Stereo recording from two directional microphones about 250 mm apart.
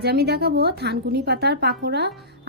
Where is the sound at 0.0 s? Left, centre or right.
Right.